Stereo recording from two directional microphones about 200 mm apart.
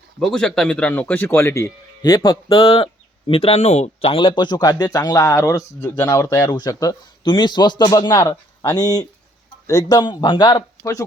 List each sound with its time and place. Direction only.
0.2 s speech: centre (ahead or behind); by 11.0 s 20° left (ahead or behind)